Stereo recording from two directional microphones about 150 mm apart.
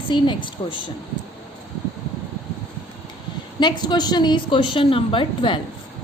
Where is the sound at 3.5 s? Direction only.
30° left (ahead or behind).